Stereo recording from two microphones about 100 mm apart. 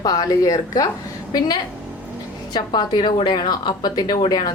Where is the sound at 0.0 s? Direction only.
40° left (ahead or behind).